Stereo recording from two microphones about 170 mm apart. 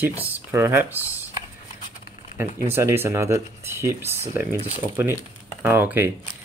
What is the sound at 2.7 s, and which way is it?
Speech, 15° right (ahead or behind).